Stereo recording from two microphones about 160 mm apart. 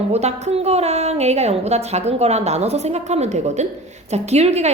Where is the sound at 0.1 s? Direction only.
45° right (ahead or behind).